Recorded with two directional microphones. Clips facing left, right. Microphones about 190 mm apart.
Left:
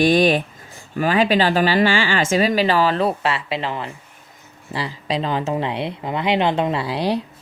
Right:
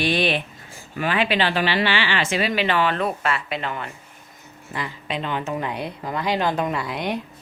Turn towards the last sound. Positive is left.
turn(degrees=30)  # may be behind; listen again after turning